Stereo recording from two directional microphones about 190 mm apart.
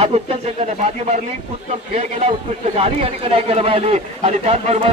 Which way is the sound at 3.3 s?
30° right (ahead or behind).